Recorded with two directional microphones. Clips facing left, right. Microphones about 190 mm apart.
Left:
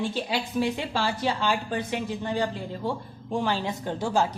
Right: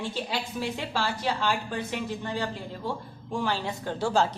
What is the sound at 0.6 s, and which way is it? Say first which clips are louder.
A woman's voice: left 5 dB; 15° left (ahead or behind).